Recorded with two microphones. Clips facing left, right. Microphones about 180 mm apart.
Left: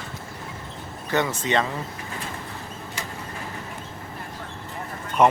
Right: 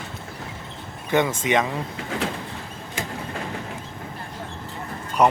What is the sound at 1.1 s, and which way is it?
Speech, 20° right (ahead or behind).